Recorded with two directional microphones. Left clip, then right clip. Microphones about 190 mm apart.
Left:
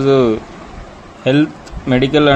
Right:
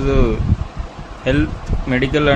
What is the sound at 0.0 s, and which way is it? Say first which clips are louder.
A man's voice: left 6 dB; 20° left (ahead or behind).